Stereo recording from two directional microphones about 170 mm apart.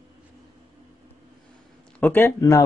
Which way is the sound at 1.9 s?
10° left (ahead or behind).